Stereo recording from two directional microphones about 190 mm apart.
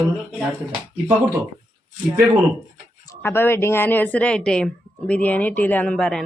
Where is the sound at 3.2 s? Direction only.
10° left (ahead or behind).